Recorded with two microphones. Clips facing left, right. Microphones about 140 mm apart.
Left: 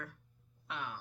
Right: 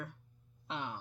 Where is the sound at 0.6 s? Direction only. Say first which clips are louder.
Right 2 dB; 25° right (ahead or behind).